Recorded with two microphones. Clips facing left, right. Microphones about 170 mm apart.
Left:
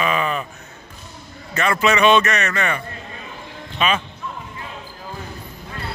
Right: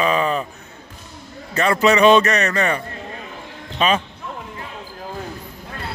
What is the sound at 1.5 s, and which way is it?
Speech, 35° right (ahead or behind).